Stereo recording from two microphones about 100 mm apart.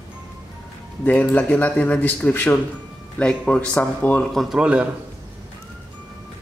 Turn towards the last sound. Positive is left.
turn(degrees=-10)  # may be behind; listen again after turning